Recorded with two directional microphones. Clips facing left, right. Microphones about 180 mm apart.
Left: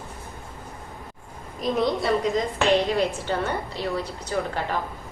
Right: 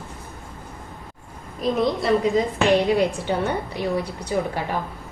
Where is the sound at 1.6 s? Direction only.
Centre (ahead or behind).